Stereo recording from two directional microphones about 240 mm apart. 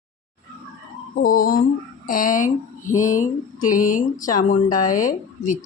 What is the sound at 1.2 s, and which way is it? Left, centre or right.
Speech, left.